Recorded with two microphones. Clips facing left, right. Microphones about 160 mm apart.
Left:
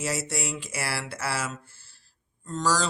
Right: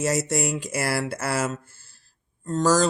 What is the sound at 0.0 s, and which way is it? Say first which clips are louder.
Speech: right 7 dB; 45° right (ahead or behind).